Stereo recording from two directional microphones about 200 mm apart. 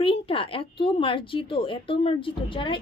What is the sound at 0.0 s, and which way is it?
Speech, 25° left (ahead or behind).